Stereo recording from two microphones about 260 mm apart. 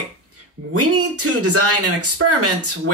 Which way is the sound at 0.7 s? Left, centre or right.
Right.